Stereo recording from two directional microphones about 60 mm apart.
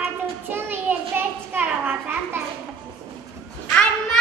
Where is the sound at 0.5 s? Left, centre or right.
Right.